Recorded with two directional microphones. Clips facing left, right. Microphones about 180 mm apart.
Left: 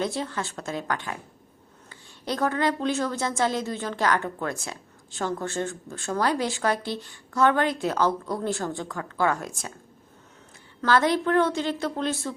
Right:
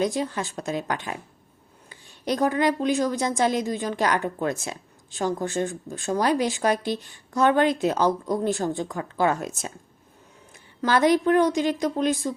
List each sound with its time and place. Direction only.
0.0 s a woman's voice: 15° right (ahead or behind)
10.8 s a woman's voice: 15° right (ahead or behind)